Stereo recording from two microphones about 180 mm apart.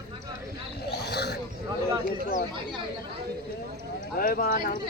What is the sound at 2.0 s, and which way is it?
Speech, 50° left (ahead or behind).